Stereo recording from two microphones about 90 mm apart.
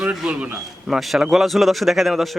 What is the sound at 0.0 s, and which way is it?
Speech, 15° right (ahead or behind).